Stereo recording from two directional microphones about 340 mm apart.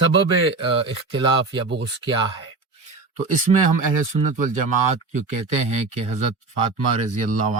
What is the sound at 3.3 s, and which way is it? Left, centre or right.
Speech, right.